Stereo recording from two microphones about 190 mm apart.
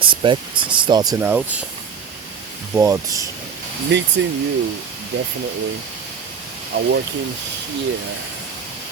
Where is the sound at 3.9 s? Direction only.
70° right (ahead or behind).